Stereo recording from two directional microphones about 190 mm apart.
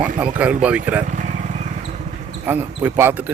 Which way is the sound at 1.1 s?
40° right (ahead or behind).